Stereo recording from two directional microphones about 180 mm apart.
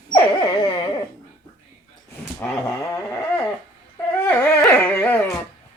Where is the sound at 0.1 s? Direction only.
25° left (ahead or behind).